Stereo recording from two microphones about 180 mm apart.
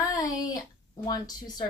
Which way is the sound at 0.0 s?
20° left (ahead or behind).